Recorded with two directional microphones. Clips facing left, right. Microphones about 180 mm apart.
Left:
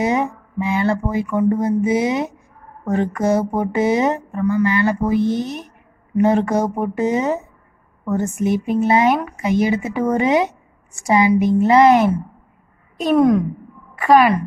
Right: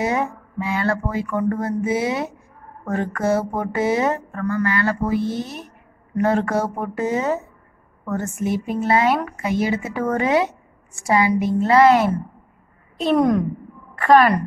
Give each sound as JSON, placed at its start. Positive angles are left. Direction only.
{"t": 0.0, "sound": "speech", "side_deg": 20}
{"t": 13.0, "sound": "a woman's voice", "side_deg": 5}